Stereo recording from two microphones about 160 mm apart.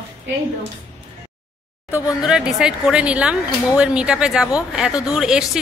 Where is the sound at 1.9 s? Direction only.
25° left (ahead or behind).